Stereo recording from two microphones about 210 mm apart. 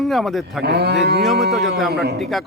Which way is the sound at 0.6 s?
50° right (ahead or behind).